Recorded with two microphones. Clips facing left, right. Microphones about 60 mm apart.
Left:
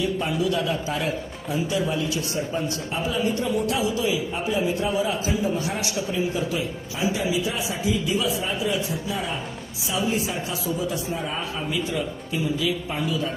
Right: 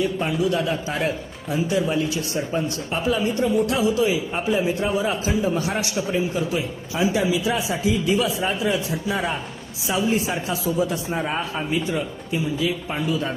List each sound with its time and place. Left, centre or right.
0.0 s a man's voice: right
7.1 s a man's voice: right